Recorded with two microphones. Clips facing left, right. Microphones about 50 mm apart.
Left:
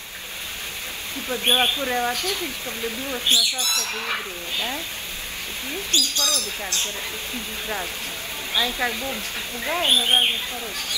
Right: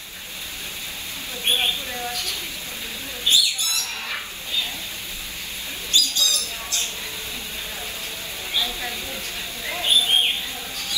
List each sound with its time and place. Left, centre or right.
1.3 s speech: left
5.9 s speech: left
8.5 s speech: left